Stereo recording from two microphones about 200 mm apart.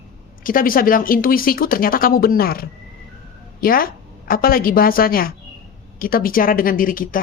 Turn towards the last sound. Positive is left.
turn(degrees=45)  # may be behind; listen again after turning